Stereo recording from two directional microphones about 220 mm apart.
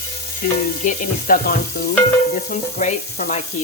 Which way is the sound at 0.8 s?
40° left (ahead or behind).